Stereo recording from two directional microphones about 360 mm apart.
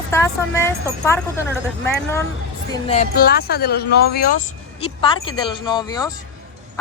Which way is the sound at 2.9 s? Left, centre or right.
Left.